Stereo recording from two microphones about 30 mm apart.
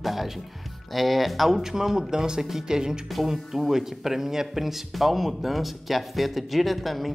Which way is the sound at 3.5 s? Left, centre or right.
Centre.